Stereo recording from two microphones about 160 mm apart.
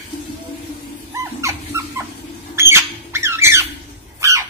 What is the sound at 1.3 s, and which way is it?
Dog, 20° right (ahead or behind).